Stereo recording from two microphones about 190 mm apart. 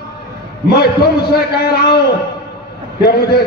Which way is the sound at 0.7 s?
55° left (ahead or behind).